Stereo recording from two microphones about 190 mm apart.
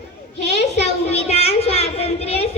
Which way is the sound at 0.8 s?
35° left (ahead or behind).